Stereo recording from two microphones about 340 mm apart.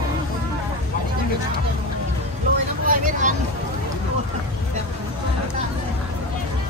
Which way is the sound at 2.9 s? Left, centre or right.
Right.